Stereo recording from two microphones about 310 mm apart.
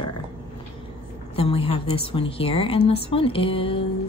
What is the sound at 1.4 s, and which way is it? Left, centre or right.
A woman's voice, centre.